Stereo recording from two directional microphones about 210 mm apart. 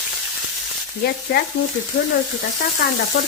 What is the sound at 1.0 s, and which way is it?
Speech, 50° left (ahead or behind).